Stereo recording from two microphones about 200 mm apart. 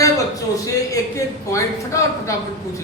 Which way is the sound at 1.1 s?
15° left (ahead or behind).